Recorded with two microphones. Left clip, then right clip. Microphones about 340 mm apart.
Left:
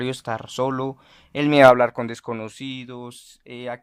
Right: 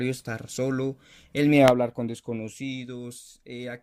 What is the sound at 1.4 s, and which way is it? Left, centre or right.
Speech, left.